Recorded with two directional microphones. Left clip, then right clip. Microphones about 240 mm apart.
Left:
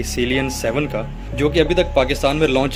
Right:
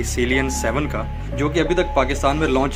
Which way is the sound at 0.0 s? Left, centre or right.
Left.